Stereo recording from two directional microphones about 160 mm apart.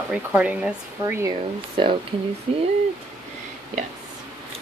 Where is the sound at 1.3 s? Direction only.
30° right (ahead or behind).